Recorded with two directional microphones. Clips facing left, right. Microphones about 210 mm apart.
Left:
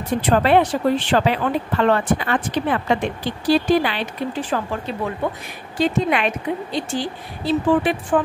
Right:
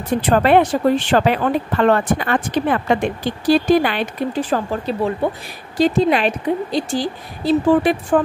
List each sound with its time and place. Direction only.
0.3 s a woman's voice: 50° right (ahead or behind)